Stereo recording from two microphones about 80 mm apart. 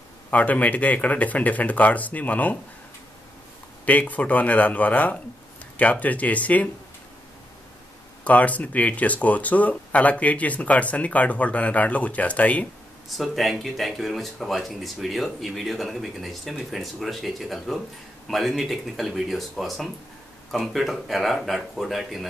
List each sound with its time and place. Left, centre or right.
0.3 s speech: centre
3.8 s speech: centre
8.2 s speech: centre
13.2 s speech: centre